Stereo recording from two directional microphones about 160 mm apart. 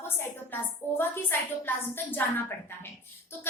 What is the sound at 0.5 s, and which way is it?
A woman's voice, 15° left (ahead or behind).